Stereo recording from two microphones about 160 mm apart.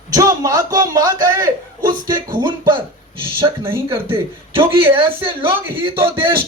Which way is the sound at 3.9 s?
35° right (ahead or behind).